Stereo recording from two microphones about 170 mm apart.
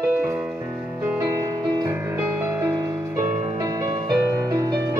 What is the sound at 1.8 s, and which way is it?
Music, 10° right (ahead or behind).